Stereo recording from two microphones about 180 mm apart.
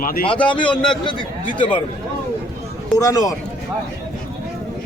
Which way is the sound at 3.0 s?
20° left (ahead or behind).